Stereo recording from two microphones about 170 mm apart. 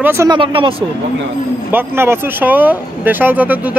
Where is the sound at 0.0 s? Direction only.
15° right (ahead or behind).